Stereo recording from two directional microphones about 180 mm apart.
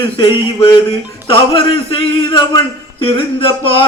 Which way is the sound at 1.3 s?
30° left (ahead or behind).